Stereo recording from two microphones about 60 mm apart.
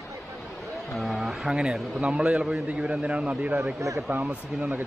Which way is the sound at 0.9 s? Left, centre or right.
Centre.